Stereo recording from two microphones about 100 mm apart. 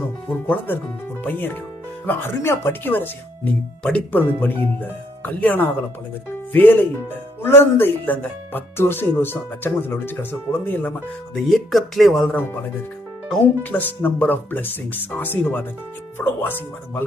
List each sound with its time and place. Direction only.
0.4 s speech: 20° left (ahead or behind)
11.4 s speech: centre (ahead or behind)
13.6 s speech: 15° left (ahead or behind)